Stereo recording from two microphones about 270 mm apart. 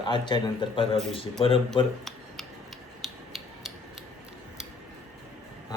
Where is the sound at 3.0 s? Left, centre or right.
Centre.